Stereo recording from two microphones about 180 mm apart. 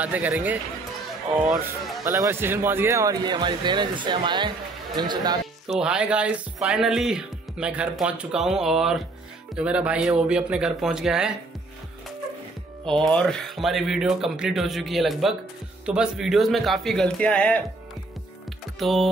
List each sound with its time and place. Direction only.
0.0 s speech: 10° right (ahead or behind)
2.0 s speech: 15° right (ahead or behind)
5.7 s speech: 5° right (ahead or behind)
12.8 s speech: 5° left (ahead or behind)
18.8 s speech: centre (ahead or behind)